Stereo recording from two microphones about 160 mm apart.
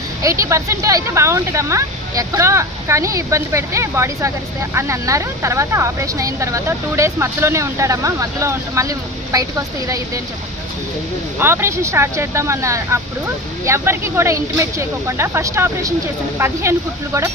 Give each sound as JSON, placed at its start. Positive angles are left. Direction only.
{"t": 0.2, "sound": "speech", "side_deg": -20}
{"t": 11.3, "sound": "speech", "side_deg": -15}